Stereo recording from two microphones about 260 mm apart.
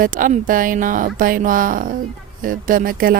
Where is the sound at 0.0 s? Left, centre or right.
Right.